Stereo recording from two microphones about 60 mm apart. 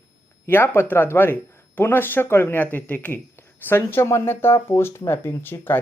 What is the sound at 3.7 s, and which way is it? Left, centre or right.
Speech, left.